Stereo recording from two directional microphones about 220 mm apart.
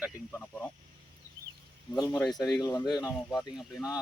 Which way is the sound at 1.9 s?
15° left (ahead or behind).